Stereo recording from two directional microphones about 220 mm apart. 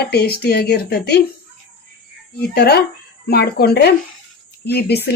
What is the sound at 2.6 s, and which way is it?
A woman's voice, 45° left (ahead or behind).